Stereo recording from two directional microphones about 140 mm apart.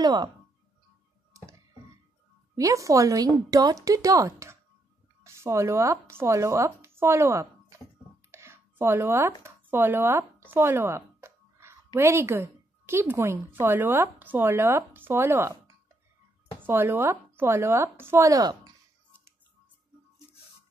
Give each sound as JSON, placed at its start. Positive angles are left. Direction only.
{"t": 0.0, "sound": "speech", "side_deg": -30}
{"t": 1.3, "sound": "music", "side_deg": -20}
{"t": 2.5, "sound": "speech", "side_deg": -25}
{"t": 8.3, "sound": "a sound", "side_deg": -20}
{"t": 9.4, "sound": "a woman's voice", "side_deg": -15}